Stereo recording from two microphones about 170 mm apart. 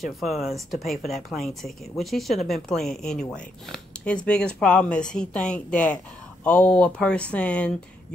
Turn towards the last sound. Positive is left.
turn(degrees=5)  # may be behind; listen again after turning